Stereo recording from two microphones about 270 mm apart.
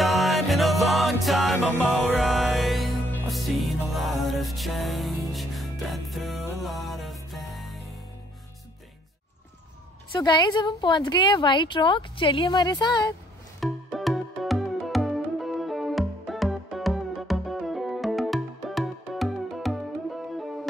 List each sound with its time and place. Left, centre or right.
0.0 s music: centre
10.1 s a woman's voice: centre
13.6 s music: centre